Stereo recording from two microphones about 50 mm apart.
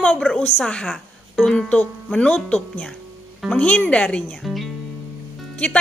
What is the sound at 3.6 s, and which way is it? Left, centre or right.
Speech, left.